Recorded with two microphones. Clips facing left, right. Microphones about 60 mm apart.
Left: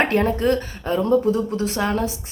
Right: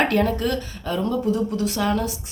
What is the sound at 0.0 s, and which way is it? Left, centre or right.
Speech, left.